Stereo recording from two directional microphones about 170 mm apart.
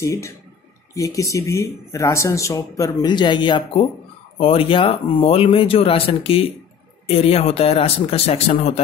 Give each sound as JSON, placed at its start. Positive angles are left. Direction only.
{"t": 0.0, "sound": "speech", "side_deg": 15}